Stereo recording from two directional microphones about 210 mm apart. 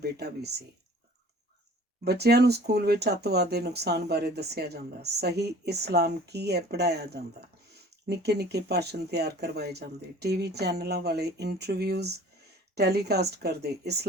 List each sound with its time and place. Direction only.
0.0 s speech: 50° right (ahead or behind)
2.0 s speech: 50° right (ahead or behind)